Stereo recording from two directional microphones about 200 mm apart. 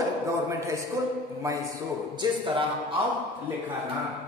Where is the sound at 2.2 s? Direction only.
25° right (ahead or behind).